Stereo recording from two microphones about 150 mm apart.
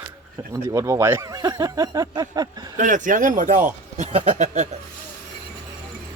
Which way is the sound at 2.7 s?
55° right (ahead or behind).